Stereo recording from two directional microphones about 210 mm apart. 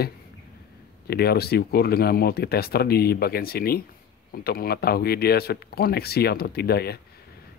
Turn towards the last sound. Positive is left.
turn(degrees=50)  # may be behind; listen again after turning